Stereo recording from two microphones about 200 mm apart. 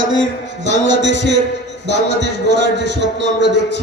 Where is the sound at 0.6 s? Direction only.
65° right (ahead or behind).